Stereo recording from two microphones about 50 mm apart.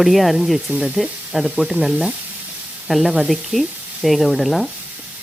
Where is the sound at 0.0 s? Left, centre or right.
Centre.